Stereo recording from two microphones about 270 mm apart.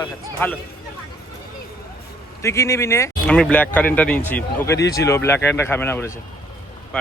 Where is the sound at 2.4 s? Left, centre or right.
Centre.